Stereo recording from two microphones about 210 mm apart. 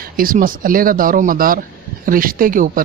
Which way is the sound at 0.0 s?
45° right (ahead or behind).